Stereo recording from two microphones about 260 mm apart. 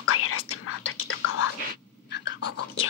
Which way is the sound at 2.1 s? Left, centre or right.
Left.